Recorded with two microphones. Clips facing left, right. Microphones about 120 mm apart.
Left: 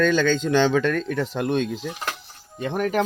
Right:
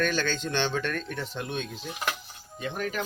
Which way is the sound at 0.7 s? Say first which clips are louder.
Left 9 dB; 90° left.